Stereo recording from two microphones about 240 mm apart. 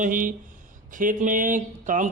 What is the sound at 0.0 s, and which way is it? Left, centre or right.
A man's voice, right.